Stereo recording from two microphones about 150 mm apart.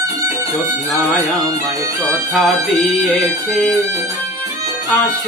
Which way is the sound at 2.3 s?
Centre (ahead or behind).